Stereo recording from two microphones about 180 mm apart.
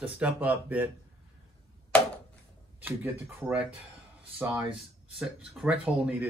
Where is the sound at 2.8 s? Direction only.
10° right (ahead or behind).